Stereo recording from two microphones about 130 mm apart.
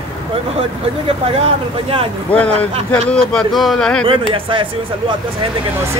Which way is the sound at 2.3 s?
10° left (ahead or behind).